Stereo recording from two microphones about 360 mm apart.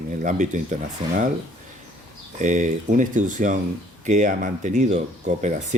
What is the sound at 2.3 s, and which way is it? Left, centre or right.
Speech, right.